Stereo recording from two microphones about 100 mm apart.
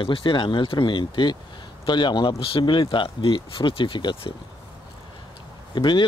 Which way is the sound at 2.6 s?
50° left (ahead or behind).